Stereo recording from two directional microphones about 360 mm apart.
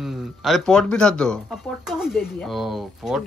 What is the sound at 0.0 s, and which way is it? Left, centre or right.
Speech, centre.